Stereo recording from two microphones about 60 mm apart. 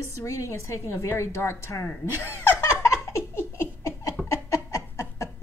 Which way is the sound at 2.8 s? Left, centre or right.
Left.